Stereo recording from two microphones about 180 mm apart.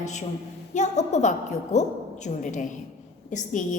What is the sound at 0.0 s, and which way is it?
A woman's voice, 40° left (ahead or behind).